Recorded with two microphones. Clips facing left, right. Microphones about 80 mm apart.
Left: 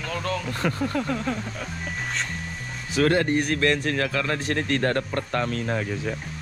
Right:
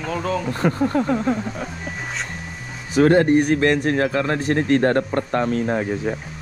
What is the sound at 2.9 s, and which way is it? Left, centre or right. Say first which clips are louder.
A man's voice: right 7 dB; right.